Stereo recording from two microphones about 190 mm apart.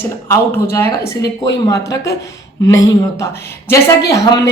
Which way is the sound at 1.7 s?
15° left (ahead or behind).